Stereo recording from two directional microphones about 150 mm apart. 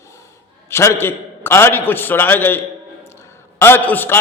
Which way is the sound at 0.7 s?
20° left (ahead or behind).